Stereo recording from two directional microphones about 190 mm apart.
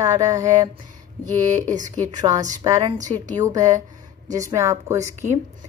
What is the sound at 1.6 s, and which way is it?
Speech, 40° right (ahead or behind).